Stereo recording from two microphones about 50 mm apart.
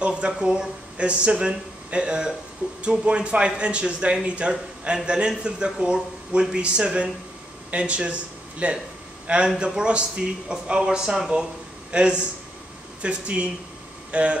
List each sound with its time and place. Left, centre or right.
0.0 s speech: right